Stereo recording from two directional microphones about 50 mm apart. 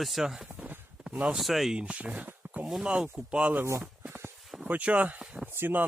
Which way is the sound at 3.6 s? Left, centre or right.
Right.